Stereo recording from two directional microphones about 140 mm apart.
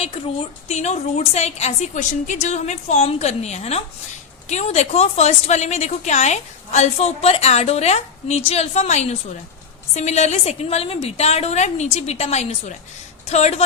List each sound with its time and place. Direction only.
0.7 s a woman's voice: 55° left (ahead or behind)